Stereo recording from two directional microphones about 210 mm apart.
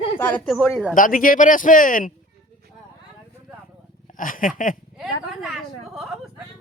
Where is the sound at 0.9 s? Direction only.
40° left (ahead or behind).